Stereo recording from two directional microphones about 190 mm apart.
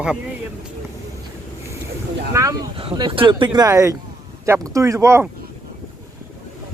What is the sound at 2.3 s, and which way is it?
A man's voice, 20° right (ahead or behind).